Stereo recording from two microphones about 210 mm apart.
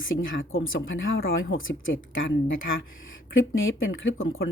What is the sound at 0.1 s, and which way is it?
Speech, 65° left (ahead or behind).